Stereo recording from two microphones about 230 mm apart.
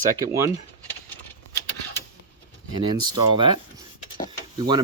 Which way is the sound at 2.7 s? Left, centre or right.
Centre.